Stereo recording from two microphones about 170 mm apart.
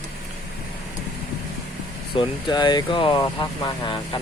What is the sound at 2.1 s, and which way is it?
Speech, 30° left (ahead or behind).